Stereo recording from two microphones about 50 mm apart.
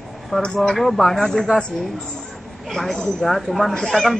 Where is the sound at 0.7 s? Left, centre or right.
Centre.